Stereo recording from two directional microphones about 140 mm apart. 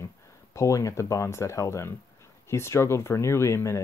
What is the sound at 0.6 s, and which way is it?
Speech, 20° left (ahead or behind).